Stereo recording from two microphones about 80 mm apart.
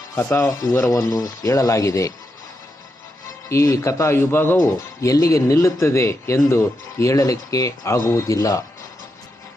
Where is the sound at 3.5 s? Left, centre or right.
Left.